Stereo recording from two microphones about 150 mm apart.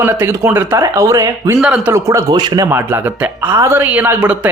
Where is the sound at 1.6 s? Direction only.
5° right (ahead or behind).